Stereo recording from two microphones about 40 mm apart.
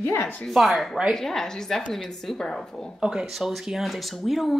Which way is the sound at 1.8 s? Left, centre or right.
Left.